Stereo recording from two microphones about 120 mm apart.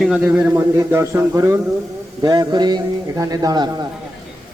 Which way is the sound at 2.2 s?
35° right (ahead or behind).